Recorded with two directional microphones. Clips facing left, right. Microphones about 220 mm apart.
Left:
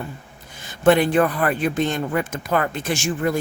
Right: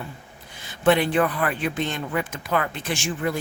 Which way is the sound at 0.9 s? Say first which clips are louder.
Left 4 dB; 45° left (ahead or behind).